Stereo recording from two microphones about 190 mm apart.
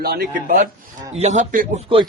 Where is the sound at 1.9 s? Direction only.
30° right (ahead or behind).